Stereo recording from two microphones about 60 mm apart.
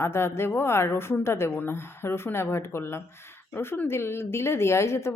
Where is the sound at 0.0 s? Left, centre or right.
Left.